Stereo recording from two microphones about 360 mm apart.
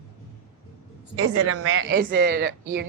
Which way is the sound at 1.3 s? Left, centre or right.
Right.